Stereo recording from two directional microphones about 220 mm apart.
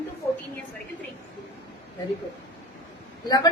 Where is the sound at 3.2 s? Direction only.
15° left (ahead or behind).